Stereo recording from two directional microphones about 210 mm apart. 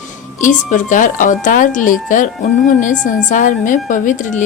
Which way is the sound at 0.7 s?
40° left (ahead or behind).